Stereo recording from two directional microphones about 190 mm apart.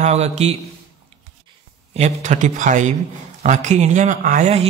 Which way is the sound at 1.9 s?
40° right (ahead or behind).